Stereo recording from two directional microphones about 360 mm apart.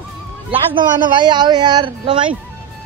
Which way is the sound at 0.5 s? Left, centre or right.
Centre.